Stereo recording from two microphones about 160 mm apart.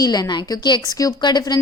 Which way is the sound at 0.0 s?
25° left (ahead or behind).